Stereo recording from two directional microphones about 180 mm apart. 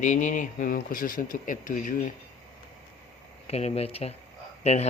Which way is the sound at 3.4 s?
35° left (ahead or behind).